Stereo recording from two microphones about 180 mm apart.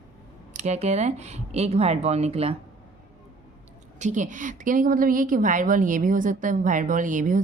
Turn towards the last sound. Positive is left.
turn(degrees=-45)  # may be behind; listen again after turning